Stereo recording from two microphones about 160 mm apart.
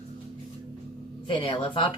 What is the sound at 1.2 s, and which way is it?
Speech, 30° left (ahead or behind).